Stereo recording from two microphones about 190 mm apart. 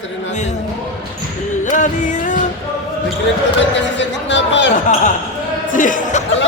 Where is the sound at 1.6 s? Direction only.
40° left (ahead or behind).